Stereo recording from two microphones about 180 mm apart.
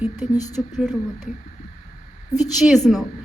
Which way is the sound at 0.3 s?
20° left (ahead or behind).